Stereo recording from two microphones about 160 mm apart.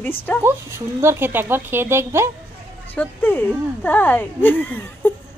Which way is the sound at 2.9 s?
10° left (ahead or behind).